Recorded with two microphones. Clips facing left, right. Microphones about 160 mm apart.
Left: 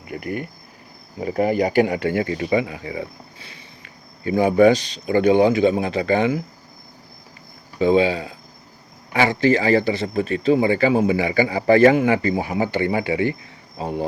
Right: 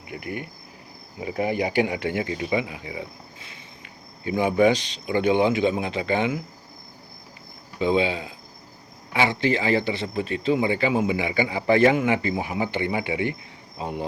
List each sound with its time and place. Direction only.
0.1 s speech: 45° left (ahead or behind)
4.3 s speech: 45° left (ahead or behind)
7.8 s speech: 45° left (ahead or behind)